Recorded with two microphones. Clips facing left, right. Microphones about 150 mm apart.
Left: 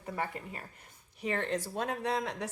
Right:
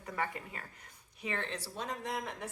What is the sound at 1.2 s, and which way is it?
Speech, 40° left (ahead or behind).